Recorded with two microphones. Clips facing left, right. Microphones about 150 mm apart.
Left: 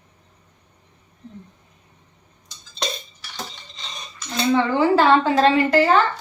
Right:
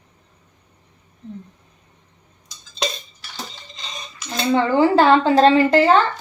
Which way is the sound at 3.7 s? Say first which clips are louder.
Right 2 dB; centre (ahead or behind).